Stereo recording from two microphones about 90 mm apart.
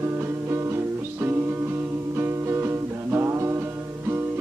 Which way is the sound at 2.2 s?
25° right (ahead or behind).